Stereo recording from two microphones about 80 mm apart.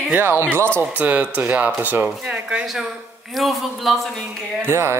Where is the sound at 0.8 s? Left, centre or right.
Centre.